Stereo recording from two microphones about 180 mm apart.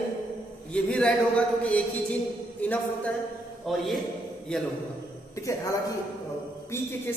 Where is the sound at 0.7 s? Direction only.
5° left (ahead or behind).